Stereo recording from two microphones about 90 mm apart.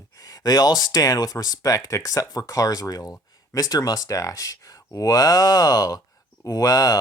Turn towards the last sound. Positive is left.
turn(degrees=45)  # may be behind; listen again after turning